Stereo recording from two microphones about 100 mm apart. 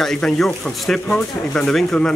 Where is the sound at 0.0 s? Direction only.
5° left (ahead or behind).